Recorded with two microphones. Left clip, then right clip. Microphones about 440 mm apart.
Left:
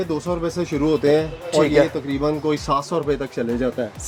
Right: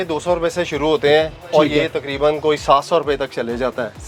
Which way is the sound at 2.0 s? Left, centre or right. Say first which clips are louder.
Right 5 dB; right.